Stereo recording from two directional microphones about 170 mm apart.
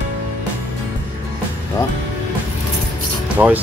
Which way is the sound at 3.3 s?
10° right (ahead or behind).